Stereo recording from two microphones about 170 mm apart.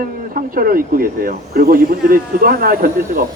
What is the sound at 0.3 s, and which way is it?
Speech, 55° right (ahead or behind).